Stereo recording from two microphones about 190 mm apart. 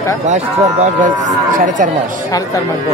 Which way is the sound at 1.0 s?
40° right (ahead or behind).